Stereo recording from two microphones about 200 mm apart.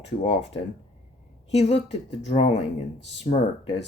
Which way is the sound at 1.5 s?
35° left (ahead or behind).